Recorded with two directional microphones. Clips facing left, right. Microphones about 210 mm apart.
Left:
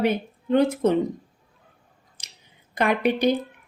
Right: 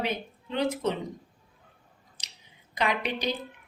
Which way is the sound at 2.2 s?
50° left (ahead or behind).